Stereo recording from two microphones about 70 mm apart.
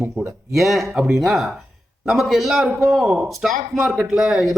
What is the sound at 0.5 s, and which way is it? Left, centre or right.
A man's voice, centre.